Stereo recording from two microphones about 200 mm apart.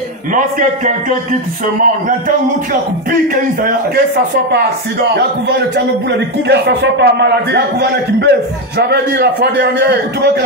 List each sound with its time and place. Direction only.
0.3 s a man's voice: 40° right (ahead or behind)
5.1 s a man's voice: 60° right (ahead or behind)